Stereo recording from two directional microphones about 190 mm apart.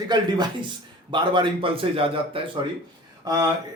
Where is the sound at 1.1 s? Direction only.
25° right (ahead or behind).